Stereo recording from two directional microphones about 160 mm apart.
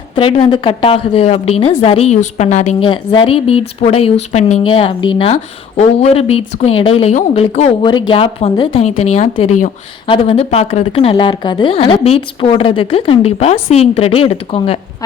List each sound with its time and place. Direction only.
0.2 s a woman's voice: 35° left (ahead or behind)
2.8 s speech: 30° left (ahead or behind)
4.6 s speech: 30° left (ahead or behind)
7.9 s speech: 30° left (ahead or behind); by 9.7 s 50° left (ahead or behind)
10.1 s speech: 35° left (ahead or behind)